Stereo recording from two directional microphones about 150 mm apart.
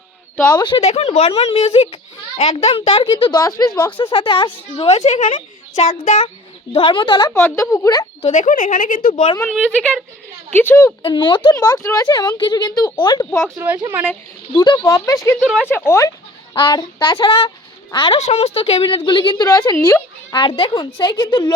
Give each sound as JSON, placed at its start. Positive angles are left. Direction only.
{"t": 0.5, "sound": "a woman's voice", "side_deg": 35}
{"t": 4.8, "sound": "a child's voice", "side_deg": 45}
{"t": 6.7, "sound": "a woman's voice", "side_deg": 35}
{"t": 7.3, "sound": "speech", "side_deg": 20}
{"t": 8.3, "sound": "speech", "side_deg": 55}
{"t": 9.1, "sound": "a woman's voice", "side_deg": 35}
{"t": 9.4, "sound": "a woman's voice", "side_deg": 5}
{"t": 11.0, "sound": "speech", "side_deg": 30}
{"t": 13.6, "sound": "speech", "side_deg": -15}
{"t": 14.5, "sound": "speech", "side_deg": 30}
{"t": 15.4, "sound": "speech", "side_deg": 5}
{"t": 15.6, "sound": "a woman's voice", "side_deg": 15}
{"t": 16.6, "sound": "a woman's voice", "side_deg": 30}